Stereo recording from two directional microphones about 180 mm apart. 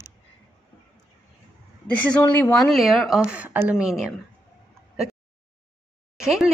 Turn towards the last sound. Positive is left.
turn(degrees=-5)  # may be behind; listen again after turning